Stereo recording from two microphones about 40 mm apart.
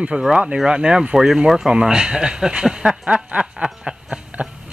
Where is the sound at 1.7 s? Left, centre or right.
Centre.